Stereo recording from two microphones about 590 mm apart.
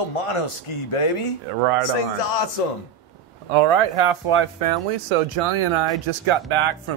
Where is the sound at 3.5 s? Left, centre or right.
Right.